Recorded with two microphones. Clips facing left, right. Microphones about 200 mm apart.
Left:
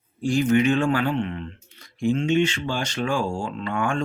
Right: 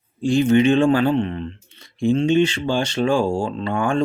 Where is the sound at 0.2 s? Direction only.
25° right (ahead or behind).